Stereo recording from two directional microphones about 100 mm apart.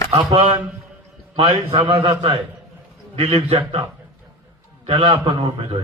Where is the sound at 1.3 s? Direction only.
70° right (ahead or behind).